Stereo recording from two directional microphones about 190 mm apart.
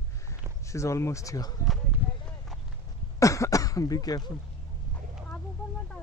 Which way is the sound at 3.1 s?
15° left (ahead or behind).